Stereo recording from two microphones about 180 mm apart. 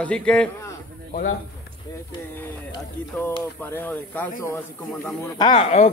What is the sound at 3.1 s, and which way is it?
A man's voice, 10° left (ahead or behind).